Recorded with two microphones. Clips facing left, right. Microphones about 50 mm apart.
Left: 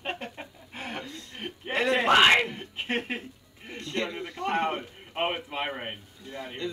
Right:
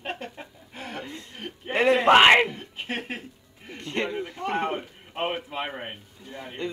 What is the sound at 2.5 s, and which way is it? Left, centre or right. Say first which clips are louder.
Speech: left 2 dB; centre.